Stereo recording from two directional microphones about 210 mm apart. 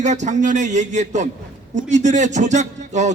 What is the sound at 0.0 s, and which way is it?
Speech, 35° right (ahead or behind).